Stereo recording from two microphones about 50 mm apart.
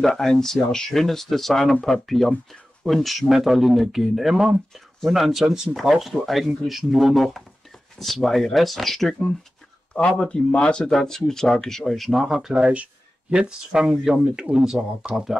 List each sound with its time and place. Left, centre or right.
0.0 s speech: centre
9.9 s speech: centre
10.9 s speech: centre
13.3 s speech: right